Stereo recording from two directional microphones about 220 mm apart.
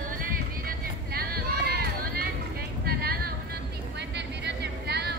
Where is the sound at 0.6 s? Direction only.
45° right (ahead or behind).